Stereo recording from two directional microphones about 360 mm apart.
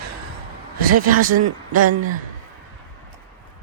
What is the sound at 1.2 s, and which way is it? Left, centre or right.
Speech, right.